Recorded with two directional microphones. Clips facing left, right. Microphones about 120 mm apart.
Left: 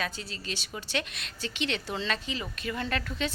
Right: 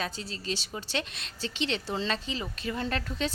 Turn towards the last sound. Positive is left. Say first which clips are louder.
# right 1 dB
turn(degrees=-35)  # may be behind; listen again after turning